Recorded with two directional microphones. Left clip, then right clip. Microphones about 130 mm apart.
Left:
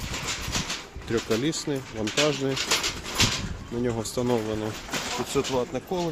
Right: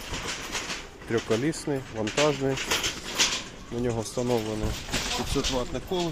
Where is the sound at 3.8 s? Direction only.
30° left (ahead or behind).